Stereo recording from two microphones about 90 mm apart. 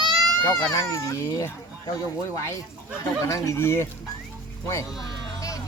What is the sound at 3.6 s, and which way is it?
Speech, 30° left (ahead or behind).